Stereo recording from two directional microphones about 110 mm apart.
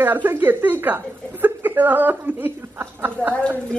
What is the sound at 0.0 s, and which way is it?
A woman's voice, 20° right (ahead or behind).